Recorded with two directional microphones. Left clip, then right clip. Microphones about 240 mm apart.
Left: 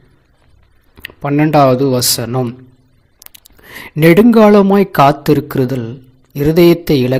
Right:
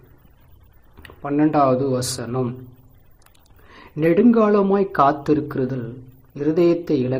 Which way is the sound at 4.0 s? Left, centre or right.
Left.